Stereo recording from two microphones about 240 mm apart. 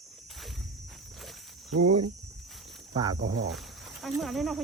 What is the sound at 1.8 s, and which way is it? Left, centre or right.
Speech, right.